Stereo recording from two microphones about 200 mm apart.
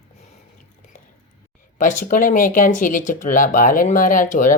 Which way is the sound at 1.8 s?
40° left (ahead or behind).